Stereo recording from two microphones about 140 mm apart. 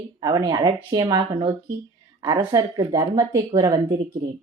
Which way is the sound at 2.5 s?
25° right (ahead or behind).